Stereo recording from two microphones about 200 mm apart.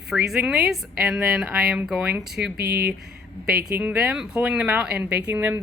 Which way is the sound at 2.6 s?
55° right (ahead or behind).